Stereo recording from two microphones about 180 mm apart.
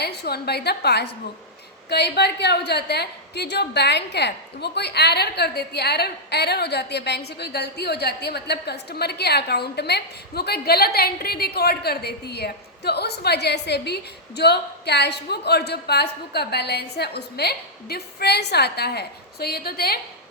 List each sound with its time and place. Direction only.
0.0 s a woman's voice: 65° left (ahead or behind)